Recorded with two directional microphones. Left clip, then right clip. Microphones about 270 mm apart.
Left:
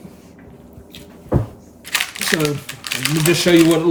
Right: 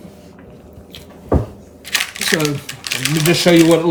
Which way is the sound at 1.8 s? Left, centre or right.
Centre.